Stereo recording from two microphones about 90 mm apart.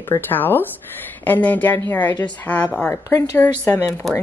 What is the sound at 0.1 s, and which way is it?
Speech, 20° left (ahead or behind).